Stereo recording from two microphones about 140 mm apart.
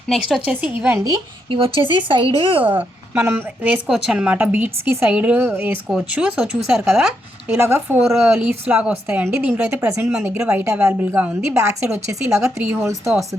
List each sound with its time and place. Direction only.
0.1 s a woman's voice: centre (ahead or behind)
1.0 s speech: 35° right (ahead or behind)
2.6 s a woman's voice: 15° right (ahead or behind)